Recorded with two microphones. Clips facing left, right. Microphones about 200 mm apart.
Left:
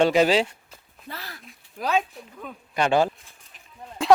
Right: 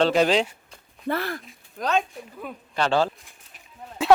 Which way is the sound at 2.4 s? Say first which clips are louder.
Right 2 dB; 5° right (ahead or behind).